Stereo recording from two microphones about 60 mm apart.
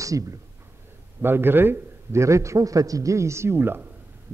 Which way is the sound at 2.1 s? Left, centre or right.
Right.